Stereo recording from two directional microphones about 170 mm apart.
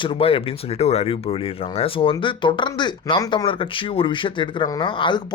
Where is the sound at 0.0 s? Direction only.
30° left (ahead or behind).